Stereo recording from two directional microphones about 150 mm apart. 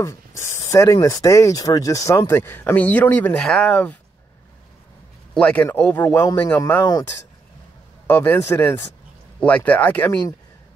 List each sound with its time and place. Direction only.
0.0 s speech: 15° left (ahead or behind)
5.3 s speech: 10° left (ahead or behind)
8.1 s speech: 15° left (ahead or behind)